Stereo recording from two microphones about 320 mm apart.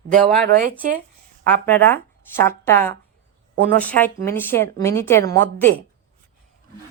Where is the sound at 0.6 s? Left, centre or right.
Right.